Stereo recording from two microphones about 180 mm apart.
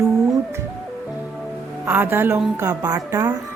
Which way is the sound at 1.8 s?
10° right (ahead or behind).